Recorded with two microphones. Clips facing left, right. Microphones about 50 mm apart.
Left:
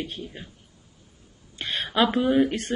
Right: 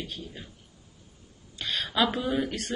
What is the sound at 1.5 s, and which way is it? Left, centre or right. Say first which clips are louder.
Speech: left 3 dB; left.